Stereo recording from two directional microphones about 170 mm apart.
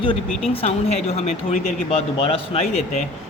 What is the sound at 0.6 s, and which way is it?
Speech, 40° left (ahead or behind).